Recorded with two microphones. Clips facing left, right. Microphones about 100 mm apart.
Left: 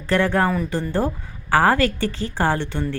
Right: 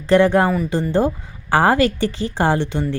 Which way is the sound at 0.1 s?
20° right (ahead or behind).